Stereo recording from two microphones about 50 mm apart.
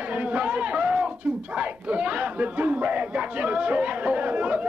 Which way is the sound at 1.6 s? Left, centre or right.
Right.